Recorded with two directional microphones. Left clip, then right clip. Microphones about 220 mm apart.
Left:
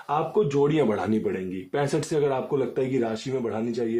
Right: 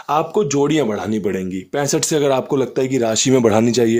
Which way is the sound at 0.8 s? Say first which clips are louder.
Right 4 dB; 25° right (ahead or behind).